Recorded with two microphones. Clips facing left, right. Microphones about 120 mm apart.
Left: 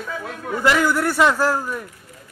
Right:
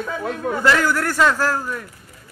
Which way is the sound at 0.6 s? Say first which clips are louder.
Left 1 dB; 15° left (ahead or behind).